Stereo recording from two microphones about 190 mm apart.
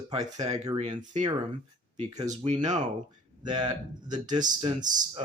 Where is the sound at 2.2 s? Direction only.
40° right (ahead or behind).